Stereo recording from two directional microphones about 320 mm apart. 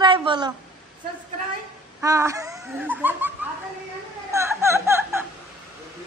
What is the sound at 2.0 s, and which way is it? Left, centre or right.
A woman's voice, centre.